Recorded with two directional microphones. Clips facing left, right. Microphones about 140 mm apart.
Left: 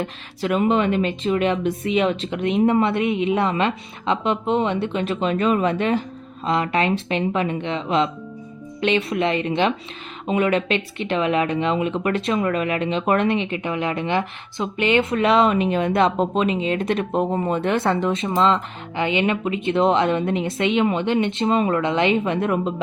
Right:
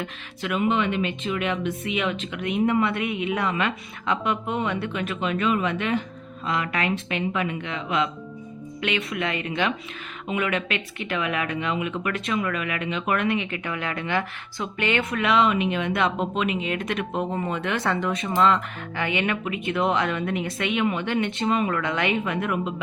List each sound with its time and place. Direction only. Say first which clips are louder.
0.0 s speech: left 6 dB; 35° left (ahead or behind)